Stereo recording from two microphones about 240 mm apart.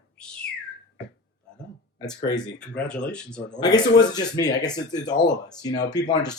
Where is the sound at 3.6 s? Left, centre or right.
Centre.